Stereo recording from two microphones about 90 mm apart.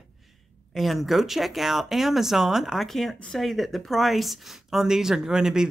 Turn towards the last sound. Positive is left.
turn(degrees=-5)  # may be behind; listen again after turning